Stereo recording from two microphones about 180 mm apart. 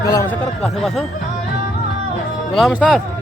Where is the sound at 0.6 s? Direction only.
Centre (ahead or behind).